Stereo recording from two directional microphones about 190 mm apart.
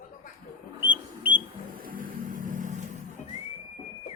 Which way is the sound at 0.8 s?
10° right (ahead or behind).